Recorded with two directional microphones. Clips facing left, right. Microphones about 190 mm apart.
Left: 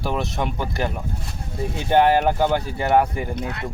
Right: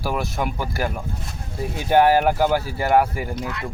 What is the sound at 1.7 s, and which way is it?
Speech, 10° right (ahead or behind).